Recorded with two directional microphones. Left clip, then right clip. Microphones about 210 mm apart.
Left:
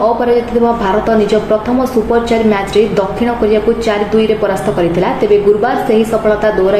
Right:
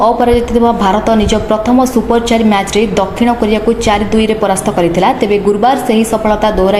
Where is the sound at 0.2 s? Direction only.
30° right (ahead or behind).